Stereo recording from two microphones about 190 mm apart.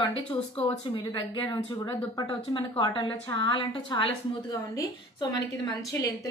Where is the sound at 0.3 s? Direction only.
30° left (ahead or behind).